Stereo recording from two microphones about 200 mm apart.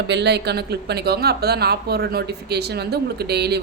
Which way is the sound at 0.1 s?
55° right (ahead or behind).